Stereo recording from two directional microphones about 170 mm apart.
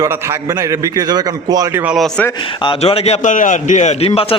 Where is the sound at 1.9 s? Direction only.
Centre (ahead or behind).